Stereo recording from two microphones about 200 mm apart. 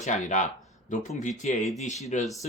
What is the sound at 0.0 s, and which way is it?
Speech, 35° left (ahead or behind).